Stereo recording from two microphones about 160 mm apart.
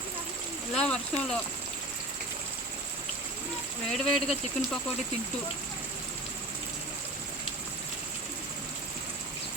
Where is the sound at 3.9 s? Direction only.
Centre (ahead or behind).